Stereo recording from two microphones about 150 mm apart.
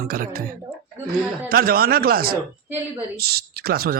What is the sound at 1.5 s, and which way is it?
Speech, 80° right.